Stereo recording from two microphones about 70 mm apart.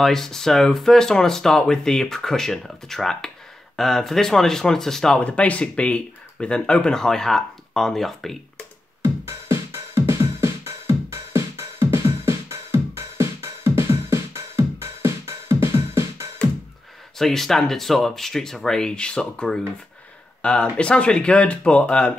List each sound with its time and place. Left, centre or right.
0.0 s speech: centre
5.2 s speech: centre
9.0 s music: right
17.2 s speech: centre